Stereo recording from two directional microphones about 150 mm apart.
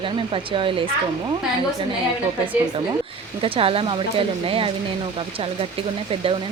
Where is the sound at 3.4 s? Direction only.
40° right (ahead or behind).